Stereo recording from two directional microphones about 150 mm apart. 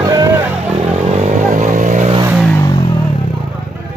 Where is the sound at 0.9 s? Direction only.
45° right (ahead or behind).